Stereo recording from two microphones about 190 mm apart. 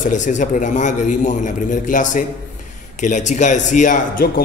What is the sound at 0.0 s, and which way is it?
A man's voice, 40° left (ahead or behind).